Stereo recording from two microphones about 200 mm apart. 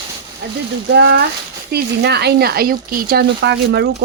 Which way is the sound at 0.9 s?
55° right (ahead or behind).